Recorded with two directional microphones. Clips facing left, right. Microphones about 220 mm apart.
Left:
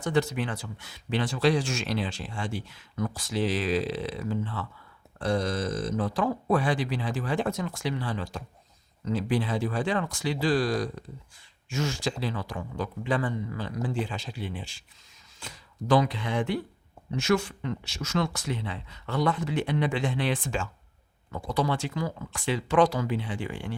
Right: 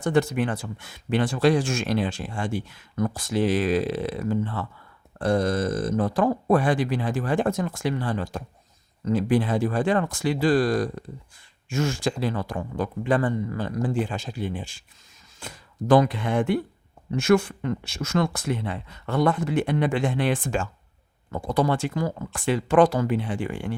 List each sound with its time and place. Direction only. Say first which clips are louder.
0.0 s speech: right 4 dB; 50° right (ahead or behind)